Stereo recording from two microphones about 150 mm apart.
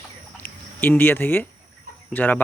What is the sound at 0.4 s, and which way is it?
Speech, 15° left (ahead or behind).